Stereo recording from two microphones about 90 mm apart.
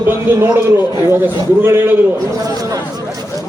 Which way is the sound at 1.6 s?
25° right (ahead or behind).